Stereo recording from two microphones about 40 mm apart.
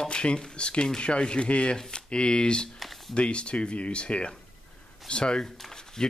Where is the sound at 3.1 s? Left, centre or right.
Left.